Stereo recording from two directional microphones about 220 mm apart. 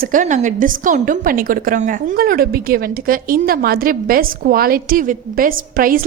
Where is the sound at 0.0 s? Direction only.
35° right (ahead or behind).